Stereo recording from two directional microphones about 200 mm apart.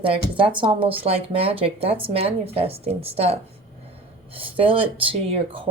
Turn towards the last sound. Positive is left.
turn(degrees=-25)  # may be behind; listen again after turning